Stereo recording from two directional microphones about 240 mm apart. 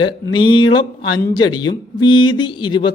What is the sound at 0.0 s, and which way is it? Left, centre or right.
A man's voice, centre.